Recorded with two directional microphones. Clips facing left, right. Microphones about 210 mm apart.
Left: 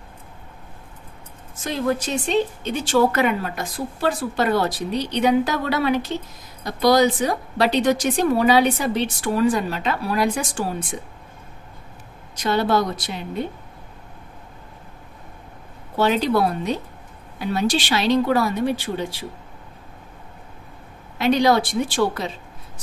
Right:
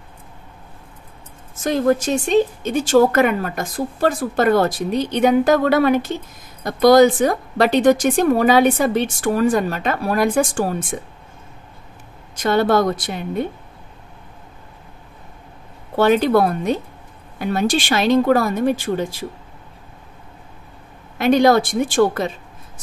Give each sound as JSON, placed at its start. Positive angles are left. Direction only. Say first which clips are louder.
{"t": 1.6, "sound": "a woman's voice", "louder": "right 6 dB", "side_deg": -45}
{"t": 12.4, "sound": "a woman's voice", "louder": "right 4 dB", "side_deg": -50}
{"t": 16.0, "sound": "a woman's voice", "louder": "right 4 dB", "side_deg": -55}
{"t": 21.2, "sound": "a woman's voice", "louder": "right 4 dB", "side_deg": -50}